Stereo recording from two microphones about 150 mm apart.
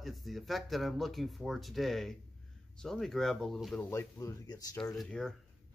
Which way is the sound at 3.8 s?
20° left (ahead or behind).